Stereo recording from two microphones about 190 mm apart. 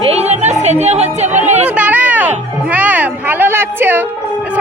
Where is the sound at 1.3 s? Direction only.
40° right (ahead or behind).